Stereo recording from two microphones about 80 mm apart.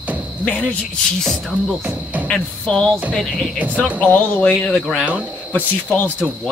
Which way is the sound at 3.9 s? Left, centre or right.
Centre.